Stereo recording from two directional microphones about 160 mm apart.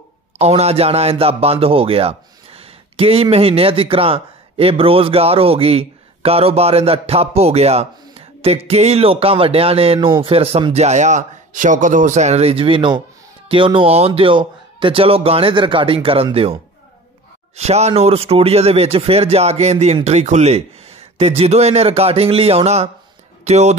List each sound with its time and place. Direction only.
0.4 s speech: 40° right (ahead or behind)
17.6 s speech: 40° right (ahead or behind)